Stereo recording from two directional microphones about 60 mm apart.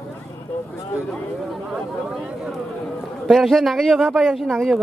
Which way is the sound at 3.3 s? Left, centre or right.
Centre.